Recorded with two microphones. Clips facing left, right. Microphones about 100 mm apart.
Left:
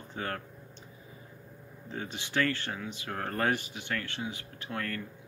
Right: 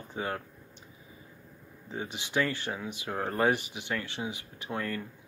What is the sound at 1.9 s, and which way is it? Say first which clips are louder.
Speech: right 2 dB; 15° right (ahead or behind).